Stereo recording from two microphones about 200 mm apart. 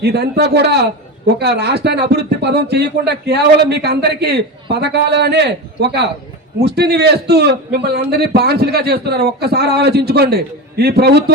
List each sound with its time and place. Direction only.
0.0 s a man's voice: 55° right (ahead or behind)